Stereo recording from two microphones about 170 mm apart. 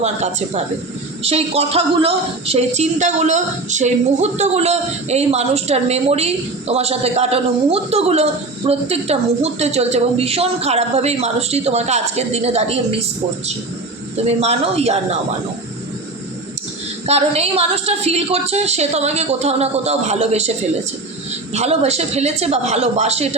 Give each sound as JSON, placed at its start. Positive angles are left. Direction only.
{"t": 0.0, "sound": "a woman's voice", "side_deg": -40}
{"t": 14.3, "sound": "a woman's voice", "side_deg": -35}
{"t": 17.1, "sound": "a woman's voice", "side_deg": -35}
{"t": 21.5, "sound": "a woman's voice", "side_deg": -40}